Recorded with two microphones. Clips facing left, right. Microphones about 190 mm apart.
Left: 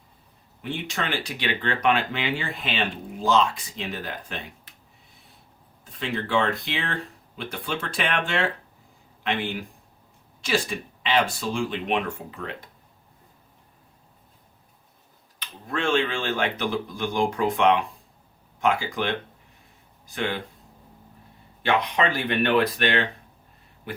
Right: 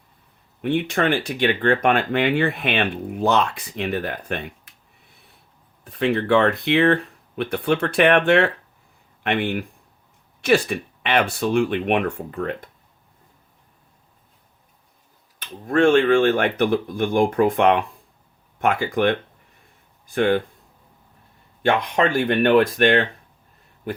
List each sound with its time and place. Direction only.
0.6 s speech: 60° right (ahead or behind)
5.8 s speech: 60° right (ahead or behind)
15.4 s speech: 50° right (ahead or behind)
21.6 s speech: 50° right (ahead or behind)